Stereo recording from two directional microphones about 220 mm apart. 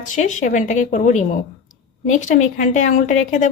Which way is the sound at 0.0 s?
35° left (ahead or behind).